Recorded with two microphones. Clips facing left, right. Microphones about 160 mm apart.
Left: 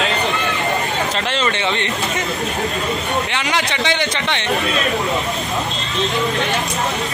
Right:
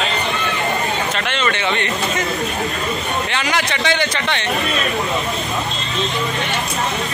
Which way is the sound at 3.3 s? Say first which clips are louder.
Even; 20° left (ahead or behind).